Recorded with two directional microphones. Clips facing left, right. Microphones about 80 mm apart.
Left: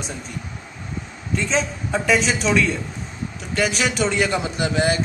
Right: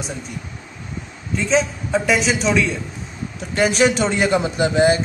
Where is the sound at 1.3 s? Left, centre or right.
Centre.